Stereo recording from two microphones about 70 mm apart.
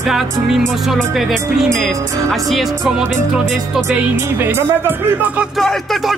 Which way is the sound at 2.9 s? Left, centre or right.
Centre.